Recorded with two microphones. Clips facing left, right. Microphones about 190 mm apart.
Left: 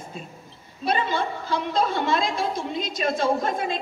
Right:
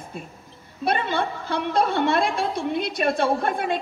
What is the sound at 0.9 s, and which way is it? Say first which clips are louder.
A woman's voice: right 1 dB; 60° right (ahead or behind).